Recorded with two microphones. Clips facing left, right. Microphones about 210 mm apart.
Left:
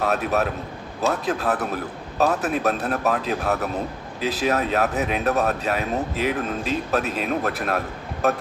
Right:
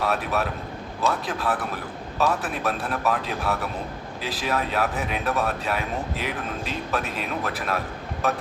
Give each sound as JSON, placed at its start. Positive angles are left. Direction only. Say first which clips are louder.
{"t": 0.0, "sound": "a man's voice", "louder": "left 3 dB", "side_deg": 40}